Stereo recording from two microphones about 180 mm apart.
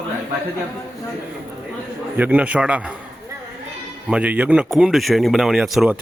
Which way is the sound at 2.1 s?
10° right (ahead or behind).